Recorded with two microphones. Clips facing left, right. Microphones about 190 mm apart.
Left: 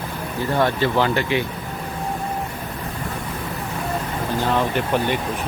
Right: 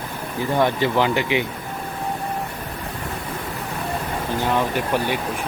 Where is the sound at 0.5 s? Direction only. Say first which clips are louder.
Even; 15° right (ahead or behind).